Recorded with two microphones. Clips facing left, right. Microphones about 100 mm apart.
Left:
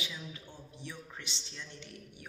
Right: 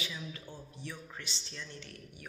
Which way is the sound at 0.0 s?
15° left (ahead or behind).